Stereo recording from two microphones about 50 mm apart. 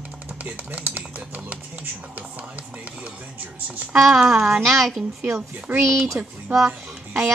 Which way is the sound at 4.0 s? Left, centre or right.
Centre.